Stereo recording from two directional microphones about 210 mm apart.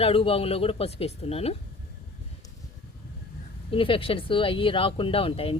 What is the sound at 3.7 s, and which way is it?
Speech, 25° left (ahead or behind).